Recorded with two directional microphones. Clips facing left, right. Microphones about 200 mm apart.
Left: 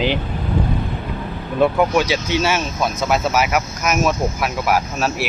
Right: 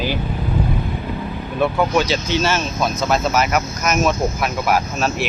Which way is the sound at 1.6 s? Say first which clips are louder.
Left 2 dB; 15° left (ahead or behind).